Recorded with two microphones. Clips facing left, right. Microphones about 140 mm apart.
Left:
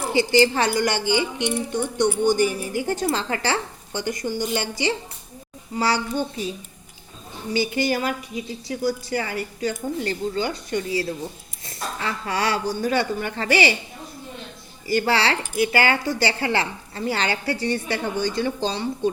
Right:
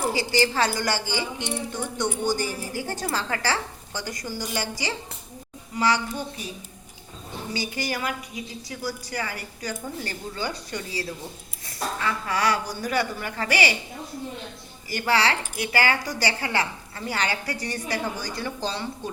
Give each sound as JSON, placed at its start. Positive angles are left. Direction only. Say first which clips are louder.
{"t": 0.1, "sound": "a woman's voice", "louder": "left 6 dB", "side_deg": 25}
{"t": 7.5, "sound": "a woman's voice", "louder": "left 8 dB", "side_deg": 25}
{"t": 14.8, "sound": "a woman's voice", "louder": "left 3 dB", "side_deg": 30}